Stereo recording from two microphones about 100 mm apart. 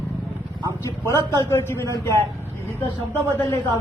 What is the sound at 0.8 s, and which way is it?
A man's voice, 30° left (ahead or behind).